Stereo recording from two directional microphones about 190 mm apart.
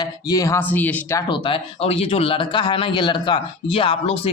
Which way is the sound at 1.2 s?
25° left (ahead or behind).